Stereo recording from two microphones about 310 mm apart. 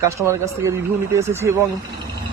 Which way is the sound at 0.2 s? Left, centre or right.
Centre.